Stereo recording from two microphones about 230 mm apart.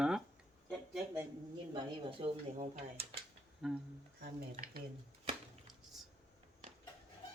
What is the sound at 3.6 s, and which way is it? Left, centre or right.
Speech, centre.